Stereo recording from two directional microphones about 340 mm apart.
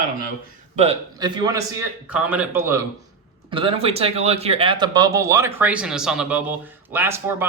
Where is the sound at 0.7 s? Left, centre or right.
Centre.